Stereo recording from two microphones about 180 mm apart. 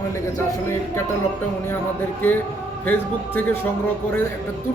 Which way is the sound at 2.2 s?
10° left (ahead or behind).